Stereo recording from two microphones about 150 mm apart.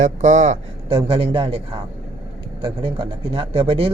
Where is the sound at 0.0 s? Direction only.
55° right (ahead or behind).